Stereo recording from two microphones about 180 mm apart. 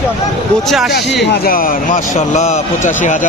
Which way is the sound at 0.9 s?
65° left (ahead or behind).